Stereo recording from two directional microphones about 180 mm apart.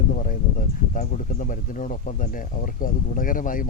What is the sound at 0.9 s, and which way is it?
Speech, 45° left (ahead or behind).